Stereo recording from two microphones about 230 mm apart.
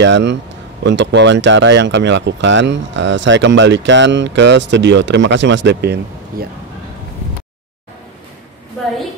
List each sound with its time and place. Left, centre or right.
0.0 s speech: right